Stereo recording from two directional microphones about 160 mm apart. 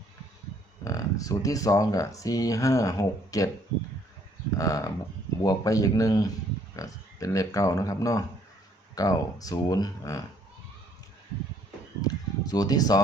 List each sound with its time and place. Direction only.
0.9 s speech: 20° left (ahead or behind)
4.5 s speech: 20° left (ahead or behind)
12.0 s speech: 25° left (ahead or behind)